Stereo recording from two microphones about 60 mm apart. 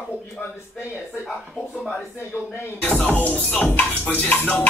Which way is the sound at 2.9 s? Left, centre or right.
Left.